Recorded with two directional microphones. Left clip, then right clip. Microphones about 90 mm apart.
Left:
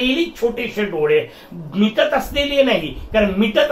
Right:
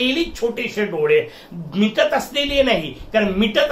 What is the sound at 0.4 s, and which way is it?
Speech, 25° right (ahead or behind).